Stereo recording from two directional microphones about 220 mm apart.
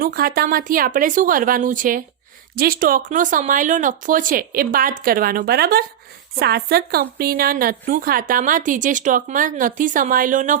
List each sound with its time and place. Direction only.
0.0 s a woman's voice: 45° right (ahead or behind)